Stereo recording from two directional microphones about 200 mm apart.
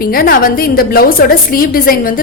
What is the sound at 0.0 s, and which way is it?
A woman's voice, 50° left (ahead or behind).